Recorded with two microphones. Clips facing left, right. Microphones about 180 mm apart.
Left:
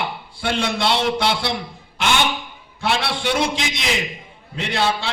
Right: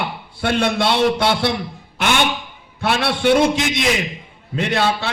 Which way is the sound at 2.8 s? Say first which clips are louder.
Right 4 dB; 55° right (ahead or behind).